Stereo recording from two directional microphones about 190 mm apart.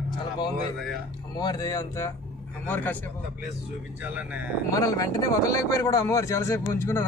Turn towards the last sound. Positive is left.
turn(degrees=15)  # may be behind; listen again after turning